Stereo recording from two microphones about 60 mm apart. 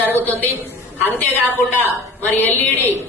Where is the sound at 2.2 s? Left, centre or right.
Left.